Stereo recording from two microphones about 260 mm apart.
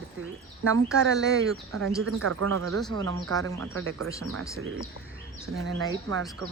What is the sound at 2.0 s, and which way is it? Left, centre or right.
Speech, right.